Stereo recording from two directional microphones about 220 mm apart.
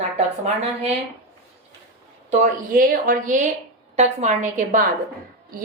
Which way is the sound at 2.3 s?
40° right (ahead or behind).